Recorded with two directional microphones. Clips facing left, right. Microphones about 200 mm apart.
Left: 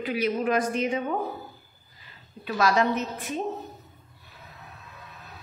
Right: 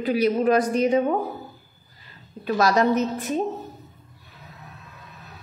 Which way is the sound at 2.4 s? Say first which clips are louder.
Right 4 dB; 40° right (ahead or behind).